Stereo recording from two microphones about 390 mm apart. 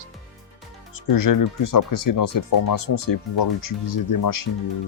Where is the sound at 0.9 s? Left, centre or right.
Left.